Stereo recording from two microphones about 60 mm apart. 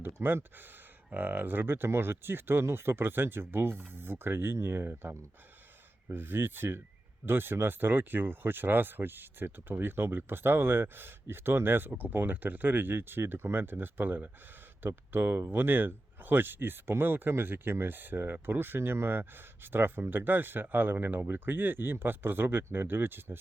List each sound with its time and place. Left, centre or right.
0.0 s speech: right